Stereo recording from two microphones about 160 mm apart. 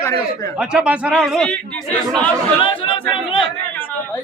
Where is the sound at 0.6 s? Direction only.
5° right (ahead or behind).